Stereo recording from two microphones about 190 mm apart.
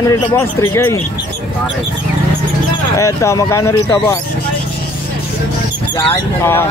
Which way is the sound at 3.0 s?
15° left (ahead or behind).